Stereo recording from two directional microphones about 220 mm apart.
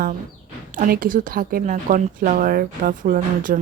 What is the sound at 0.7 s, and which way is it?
A woman's voice, 35° right (ahead or behind).